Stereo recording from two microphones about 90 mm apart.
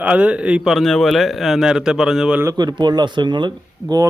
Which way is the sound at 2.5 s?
55° right (ahead or behind).